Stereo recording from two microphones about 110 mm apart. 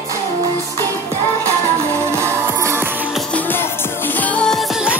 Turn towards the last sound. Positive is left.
turn(degrees=5)  # may be behind; listen again after turning